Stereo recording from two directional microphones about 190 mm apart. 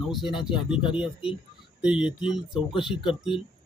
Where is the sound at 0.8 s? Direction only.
25° left (ahead or behind).